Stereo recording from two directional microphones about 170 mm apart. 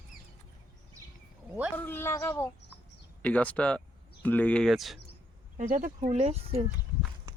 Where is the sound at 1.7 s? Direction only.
10° left (ahead or behind).